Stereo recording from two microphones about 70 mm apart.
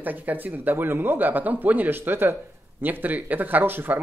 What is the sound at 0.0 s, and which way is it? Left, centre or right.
Speech, right.